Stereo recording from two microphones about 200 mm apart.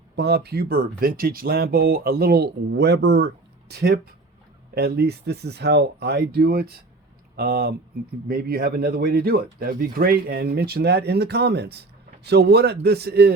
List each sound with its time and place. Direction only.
0.2 s speech: 55° right (ahead or behind)